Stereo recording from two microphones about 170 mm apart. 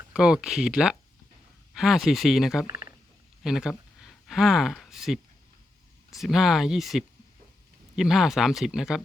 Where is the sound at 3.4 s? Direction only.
5° right (ahead or behind).